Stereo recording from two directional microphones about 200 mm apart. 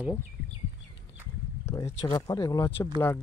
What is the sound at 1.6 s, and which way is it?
Speech, 15° left (ahead or behind).